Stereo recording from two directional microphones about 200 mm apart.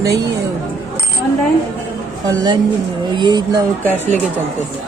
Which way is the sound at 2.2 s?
20° right (ahead or behind).